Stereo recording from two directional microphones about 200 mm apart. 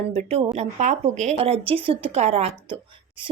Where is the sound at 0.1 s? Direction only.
30° right (ahead or behind).